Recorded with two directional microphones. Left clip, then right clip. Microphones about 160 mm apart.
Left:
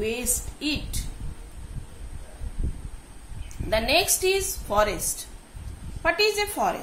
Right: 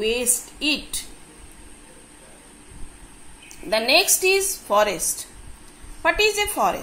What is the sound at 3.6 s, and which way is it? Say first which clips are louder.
A woman's voice: right 4 dB; 15° right (ahead or behind).